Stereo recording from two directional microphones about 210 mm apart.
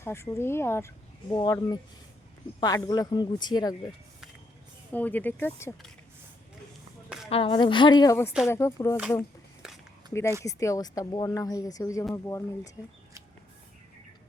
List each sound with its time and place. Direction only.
0.0 s speech: 10° left (ahead or behind)
4.9 s speech: 10° left (ahead or behind)
7.3 s speech: 25° left (ahead or behind)
10.1 s speech: 10° left (ahead or behind)